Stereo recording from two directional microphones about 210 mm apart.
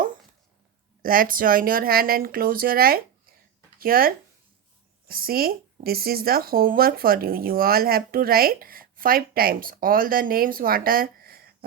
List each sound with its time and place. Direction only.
1.0 s speech: 40° right (ahead or behind)